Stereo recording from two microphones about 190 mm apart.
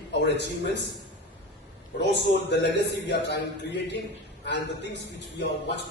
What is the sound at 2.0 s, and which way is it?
A man's voice, 65° left (ahead or behind).